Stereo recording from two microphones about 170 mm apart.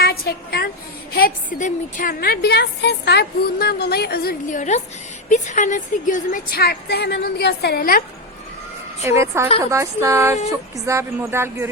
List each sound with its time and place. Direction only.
0.0 s a woman's voice: 65° left (ahead or behind)
1.5 s a woman's voice: 50° left (ahead or behind); by 4.6 s 65° left (ahead or behind)
5.3 s a woman's voice: 45° left (ahead or behind)
9.0 s speech: 15° right (ahead or behind)